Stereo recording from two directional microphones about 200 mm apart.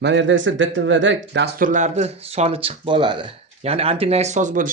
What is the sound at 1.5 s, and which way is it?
Speech, 40° right (ahead or behind).